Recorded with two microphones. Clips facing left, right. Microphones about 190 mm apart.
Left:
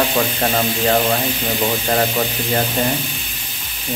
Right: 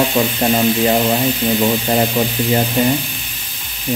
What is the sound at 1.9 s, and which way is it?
Speech, 15° right (ahead or behind).